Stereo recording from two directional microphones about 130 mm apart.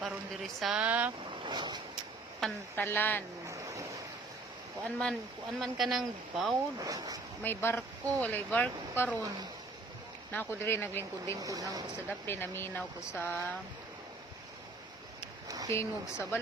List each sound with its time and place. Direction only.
0.0 s a sound: centre (ahead or behind)
1.3 s speech: 35° right (ahead or behind)
2.4 s speech: 5° left (ahead or behind)
2.7 s speech: 15° left (ahead or behind)
3.4 s boat: 25° right (ahead or behind)
4.8 s speech: 5° left (ahead or behind)
6.7 s speech: 30° right (ahead or behind)
7.4 s speech: 15° left (ahead or behind)
10.3 s speech: 15° left (ahead or behind)
11.3 s speech: 30° right (ahead or behind)
12.2 s speech: 15° left (ahead or behind)
15.4 s a sound: 30° right (ahead or behind)
15.7 s speech: 20° left (ahead or behind)